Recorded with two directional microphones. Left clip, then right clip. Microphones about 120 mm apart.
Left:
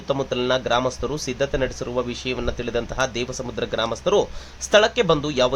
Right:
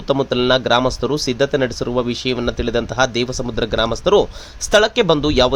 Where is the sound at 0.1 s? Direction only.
50° right (ahead or behind).